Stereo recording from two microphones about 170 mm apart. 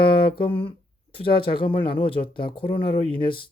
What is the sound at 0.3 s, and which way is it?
Speech, 30° left (ahead or behind).